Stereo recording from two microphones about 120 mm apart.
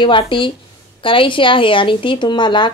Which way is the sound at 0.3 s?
45° left (ahead or behind).